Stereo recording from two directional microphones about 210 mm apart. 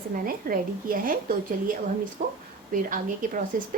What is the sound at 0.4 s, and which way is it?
Speech, 40° right (ahead or behind).